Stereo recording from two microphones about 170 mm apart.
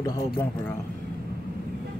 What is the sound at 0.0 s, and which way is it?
Speech, 15° left (ahead or behind).